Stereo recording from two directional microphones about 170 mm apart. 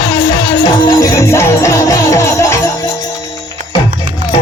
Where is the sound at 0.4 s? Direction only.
20° left (ahead or behind).